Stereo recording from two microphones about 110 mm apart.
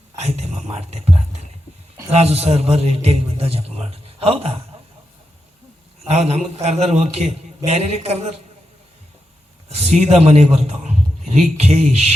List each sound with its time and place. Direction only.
0.2 s whispering: 75° right (ahead or behind)
2.0 s a man's voice: 70° right (ahead or behind)
6.1 s a man's voice: 75° right (ahead or behind)
9.6 s a man's voice: 80° right
11.5 s a man's voice: 75° right (ahead or behind)